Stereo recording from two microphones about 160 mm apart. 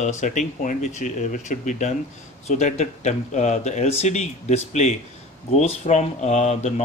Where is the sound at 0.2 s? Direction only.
50° left (ahead or behind).